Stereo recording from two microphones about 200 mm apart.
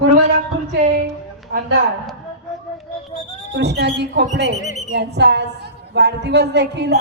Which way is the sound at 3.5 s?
55° right (ahead or behind).